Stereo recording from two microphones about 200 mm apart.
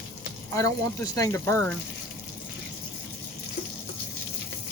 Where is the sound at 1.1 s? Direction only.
15° left (ahead or behind).